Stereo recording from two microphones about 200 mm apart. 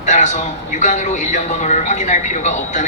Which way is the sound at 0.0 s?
35° left (ahead or behind).